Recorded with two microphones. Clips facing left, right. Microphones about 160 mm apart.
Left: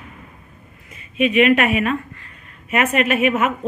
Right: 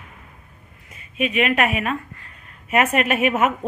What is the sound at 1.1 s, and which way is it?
Speech, 40° right (ahead or behind).